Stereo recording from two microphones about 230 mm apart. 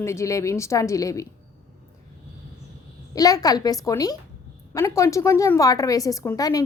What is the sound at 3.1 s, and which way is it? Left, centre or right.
A woman's voice, centre.